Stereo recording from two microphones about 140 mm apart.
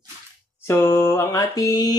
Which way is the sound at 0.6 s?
15° left (ahead or behind).